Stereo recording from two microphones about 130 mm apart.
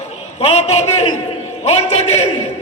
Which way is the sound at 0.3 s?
55° left (ahead or behind).